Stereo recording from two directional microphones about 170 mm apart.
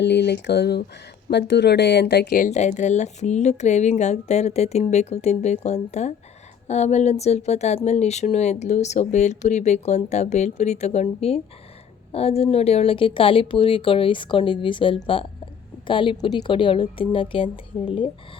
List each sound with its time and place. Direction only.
0.0 s speech: 80° left
2.4 s a woman's voice: 45° left (ahead or behind)